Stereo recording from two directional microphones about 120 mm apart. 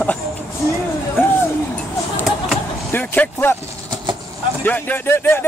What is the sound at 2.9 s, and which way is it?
Speech, 15° left (ahead or behind).